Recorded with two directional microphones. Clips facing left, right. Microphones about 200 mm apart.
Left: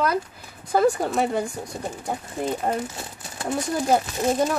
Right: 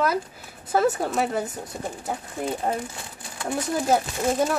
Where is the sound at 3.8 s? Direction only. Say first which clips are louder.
Left 1 dB; centre (ahead or behind).